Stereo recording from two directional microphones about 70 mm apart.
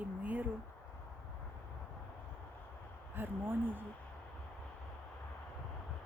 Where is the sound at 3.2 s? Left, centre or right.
Right.